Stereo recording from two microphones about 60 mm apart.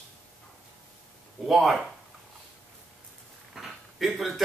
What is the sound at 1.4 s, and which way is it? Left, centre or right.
Speech, centre.